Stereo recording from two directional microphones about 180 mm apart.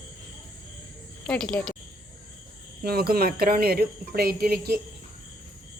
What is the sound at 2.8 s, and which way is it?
Speech, 60° right (ahead or behind).